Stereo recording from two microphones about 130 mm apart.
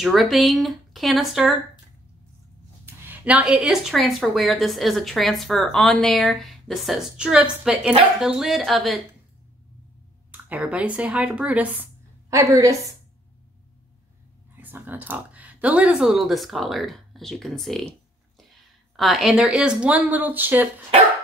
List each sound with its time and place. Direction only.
0.0 s speech: centre (ahead or behind)
2.8 s speech: 15° right (ahead or behind); by 9.0 s centre (ahead or behind)
10.3 s speech: 10° right (ahead or behind)
12.3 s a woman's voice: 25° right (ahead or behind)
14.6 s speech: 15° right (ahead or behind)